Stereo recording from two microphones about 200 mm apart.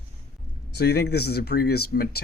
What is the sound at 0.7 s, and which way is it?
Speech, 55° left (ahead or behind).